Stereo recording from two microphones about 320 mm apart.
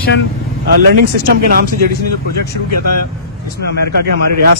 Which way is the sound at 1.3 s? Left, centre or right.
Right.